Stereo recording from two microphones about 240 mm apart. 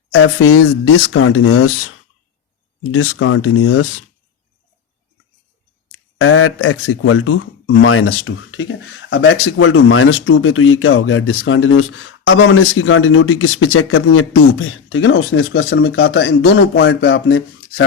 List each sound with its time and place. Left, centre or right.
0.1 s speech: left
2.9 s speech: left
5.9 s speech: left